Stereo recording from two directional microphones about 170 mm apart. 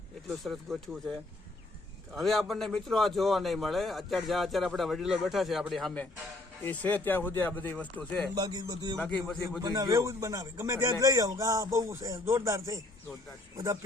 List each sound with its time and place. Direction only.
0.4 s a man's voice: centre (ahead or behind)
8.4 s speech: 25° right (ahead or behind)
9.0 s speech: 5° left (ahead or behind)
9.6 s speech: 20° right (ahead or behind)